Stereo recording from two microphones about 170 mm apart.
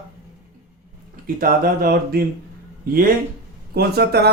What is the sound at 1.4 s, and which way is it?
Speech, 60° right (ahead or behind).